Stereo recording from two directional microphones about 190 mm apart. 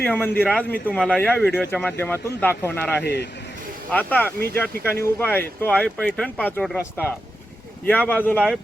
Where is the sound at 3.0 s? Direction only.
65° left (ahead or behind).